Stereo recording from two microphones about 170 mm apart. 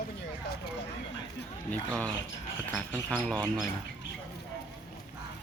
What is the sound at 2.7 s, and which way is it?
Speech, 10° left (ahead or behind).